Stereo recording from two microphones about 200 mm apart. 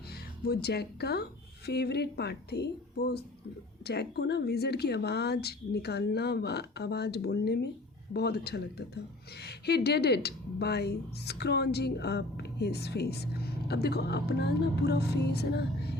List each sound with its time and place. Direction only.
0.1 s speech: 55° left (ahead or behind)